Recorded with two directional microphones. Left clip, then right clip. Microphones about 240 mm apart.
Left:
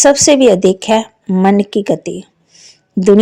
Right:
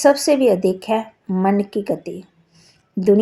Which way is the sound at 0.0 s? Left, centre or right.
Left.